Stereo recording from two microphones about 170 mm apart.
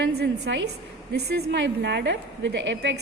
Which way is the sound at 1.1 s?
75° right (ahead or behind).